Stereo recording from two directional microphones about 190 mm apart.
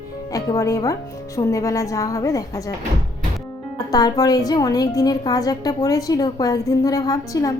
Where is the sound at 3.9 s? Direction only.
20° left (ahead or behind).